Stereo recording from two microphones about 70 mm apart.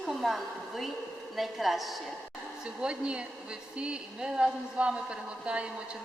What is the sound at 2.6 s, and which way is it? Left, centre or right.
A woman's voice, centre.